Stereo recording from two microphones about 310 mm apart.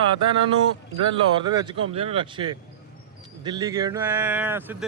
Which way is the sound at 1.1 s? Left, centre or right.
Centre.